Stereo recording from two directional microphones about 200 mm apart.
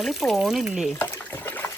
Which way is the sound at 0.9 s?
10° left (ahead or behind).